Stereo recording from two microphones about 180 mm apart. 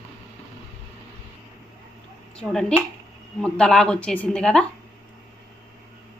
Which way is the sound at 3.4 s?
5° left (ahead or behind).